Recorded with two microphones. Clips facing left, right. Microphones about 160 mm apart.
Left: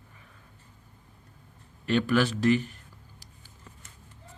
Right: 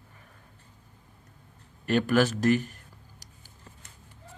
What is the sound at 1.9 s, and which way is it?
Speech, 45° right (ahead or behind).